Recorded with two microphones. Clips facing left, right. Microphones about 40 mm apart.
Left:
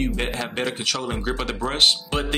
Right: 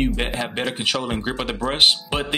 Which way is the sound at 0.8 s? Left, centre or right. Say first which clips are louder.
Right 3 dB; right.